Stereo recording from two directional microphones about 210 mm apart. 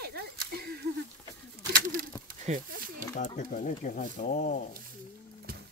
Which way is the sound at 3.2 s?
35° left (ahead or behind).